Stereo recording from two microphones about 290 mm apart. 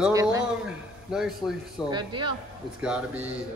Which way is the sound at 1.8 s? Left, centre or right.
Centre.